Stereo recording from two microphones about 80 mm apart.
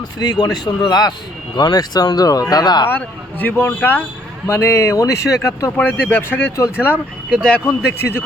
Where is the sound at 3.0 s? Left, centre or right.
Left.